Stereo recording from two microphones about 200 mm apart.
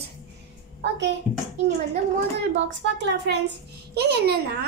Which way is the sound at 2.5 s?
60° right (ahead or behind).